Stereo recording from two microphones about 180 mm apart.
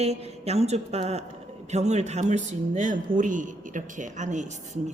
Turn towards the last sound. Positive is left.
turn(degrees=-40)  # may be behind; listen again after turning